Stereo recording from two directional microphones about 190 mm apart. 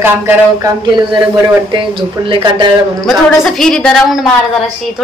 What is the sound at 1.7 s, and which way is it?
Speech, 25° right (ahead or behind).